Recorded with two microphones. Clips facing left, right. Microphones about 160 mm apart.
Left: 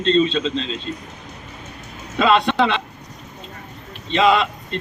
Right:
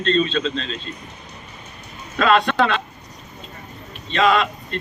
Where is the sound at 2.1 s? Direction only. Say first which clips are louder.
Left 1 dB; 20° left (ahead or behind).